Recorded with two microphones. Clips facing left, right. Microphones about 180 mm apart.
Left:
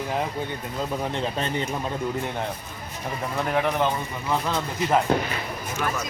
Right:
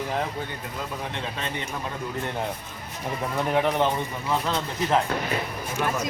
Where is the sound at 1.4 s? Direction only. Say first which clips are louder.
Left 5 dB; 35° left (ahead or behind).